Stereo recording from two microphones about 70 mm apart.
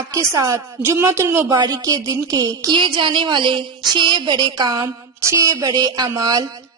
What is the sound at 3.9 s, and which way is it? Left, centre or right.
Speech, right.